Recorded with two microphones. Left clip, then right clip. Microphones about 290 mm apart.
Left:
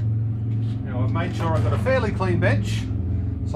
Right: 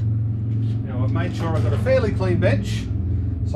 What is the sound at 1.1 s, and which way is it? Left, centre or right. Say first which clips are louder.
Speech: left 1 dB; centre.